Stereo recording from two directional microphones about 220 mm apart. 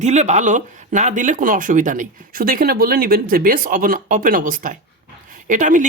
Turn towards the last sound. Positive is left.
turn(degrees=-35)  # may be behind; listen again after turning